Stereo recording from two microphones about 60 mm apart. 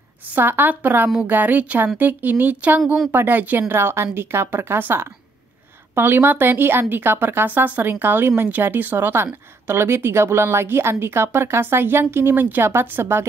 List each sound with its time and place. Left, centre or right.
0.3 s speech: right